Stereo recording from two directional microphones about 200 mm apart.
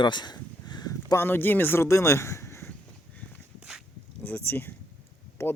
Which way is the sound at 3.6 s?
5° right (ahead or behind).